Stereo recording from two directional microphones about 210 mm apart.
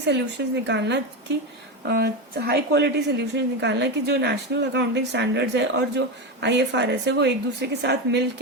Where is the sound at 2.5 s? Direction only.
55° right (ahead or behind).